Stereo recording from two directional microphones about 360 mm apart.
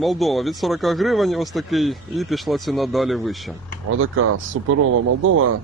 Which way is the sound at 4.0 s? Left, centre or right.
Right.